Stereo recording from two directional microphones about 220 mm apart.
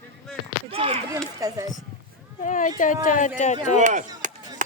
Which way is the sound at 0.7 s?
25° right (ahead or behind).